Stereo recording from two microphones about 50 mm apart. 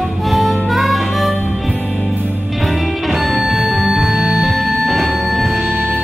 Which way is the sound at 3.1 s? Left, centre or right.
Centre.